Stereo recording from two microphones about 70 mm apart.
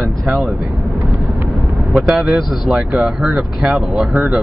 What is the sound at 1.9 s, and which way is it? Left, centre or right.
Speech, centre.